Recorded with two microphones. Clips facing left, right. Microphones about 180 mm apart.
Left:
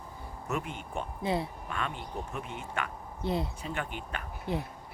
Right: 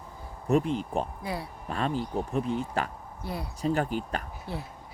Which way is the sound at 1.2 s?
25° left (ahead or behind).